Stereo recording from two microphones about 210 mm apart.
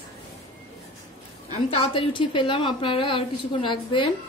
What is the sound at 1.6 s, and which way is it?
A woman's voice, 30° left (ahead or behind).